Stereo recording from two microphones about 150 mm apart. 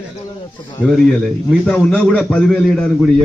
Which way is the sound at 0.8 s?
5° left (ahead or behind).